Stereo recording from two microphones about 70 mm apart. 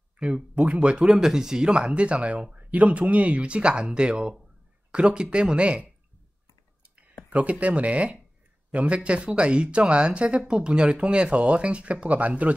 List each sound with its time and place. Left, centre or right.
0.6 s speech: centre
7.2 s speech: centre